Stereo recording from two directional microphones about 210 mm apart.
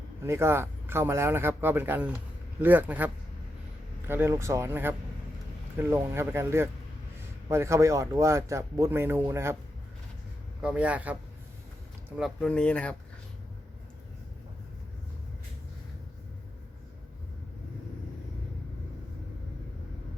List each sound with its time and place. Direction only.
0.3 s speech: 10° right (ahead or behind)
10.6 s speech: 5° right (ahead or behind)